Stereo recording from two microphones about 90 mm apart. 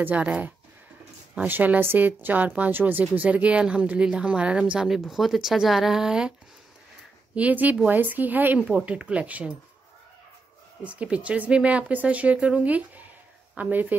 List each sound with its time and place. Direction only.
0.0 s a woman's voice: 15° right (ahead or behind)
1.5 s a woman's voice: 20° right (ahead or behind)
7.3 s a woman's voice: 15° right (ahead or behind)
10.8 s a woman's voice: 15° right (ahead or behind)